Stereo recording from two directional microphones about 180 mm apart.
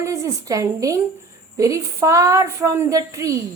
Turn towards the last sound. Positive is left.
turn(degrees=-15)  # may be behind; listen again after turning